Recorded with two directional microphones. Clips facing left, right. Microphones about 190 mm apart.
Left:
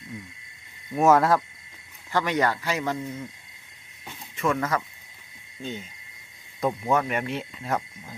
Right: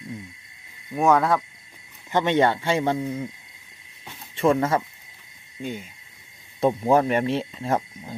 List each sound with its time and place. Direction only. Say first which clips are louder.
0.9 s cricket: left 1 dB; centre (ahead or behind)
2.1 s speech: right 4 dB; 25° right (ahead or behind)
4.4 s speech: right 5 dB; 30° right (ahead or behind)
5.6 s owl: right 3 dB; 10° right (ahead or behind)
6.6 s speech: right 5 dB; 30° right (ahead or behind)